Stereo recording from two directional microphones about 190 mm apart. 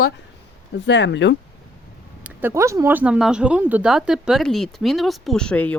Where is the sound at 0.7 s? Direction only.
70° left (ahead or behind).